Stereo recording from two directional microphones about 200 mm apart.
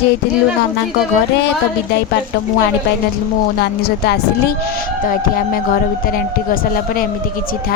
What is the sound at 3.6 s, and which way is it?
Speech, 55° left (ahead or behind).